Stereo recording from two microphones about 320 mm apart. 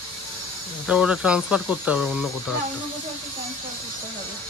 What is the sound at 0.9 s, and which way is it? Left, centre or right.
Speech, centre.